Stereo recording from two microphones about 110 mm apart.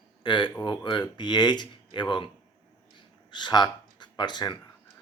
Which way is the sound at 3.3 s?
40° left (ahead or behind).